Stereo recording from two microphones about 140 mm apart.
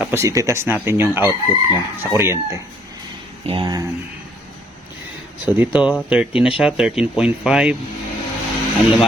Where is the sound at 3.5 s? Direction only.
40° right (ahead or behind).